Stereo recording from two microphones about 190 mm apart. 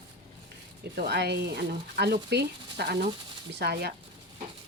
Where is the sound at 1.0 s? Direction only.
60° right (ahead or behind).